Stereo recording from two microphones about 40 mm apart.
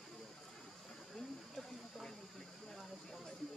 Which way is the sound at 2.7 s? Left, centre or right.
Centre.